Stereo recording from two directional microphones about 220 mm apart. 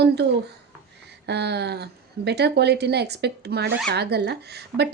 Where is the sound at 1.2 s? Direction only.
50° right (ahead or behind).